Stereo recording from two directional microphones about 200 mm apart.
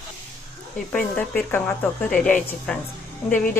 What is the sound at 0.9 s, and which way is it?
A woman's voice, 5° left (ahead or behind).